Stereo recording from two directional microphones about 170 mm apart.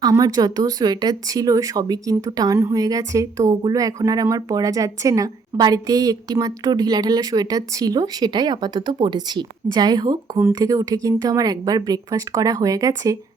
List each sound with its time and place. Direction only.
0.0 s speech: 20° right (ahead or behind)